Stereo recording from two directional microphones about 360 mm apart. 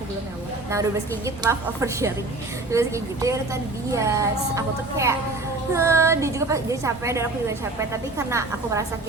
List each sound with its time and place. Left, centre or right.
0.7 s a woman's voice: centre
8.3 s a woman's voice: centre